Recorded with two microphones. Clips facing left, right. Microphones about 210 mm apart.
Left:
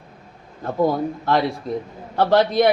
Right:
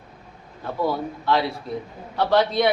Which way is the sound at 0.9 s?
45° left (ahead or behind).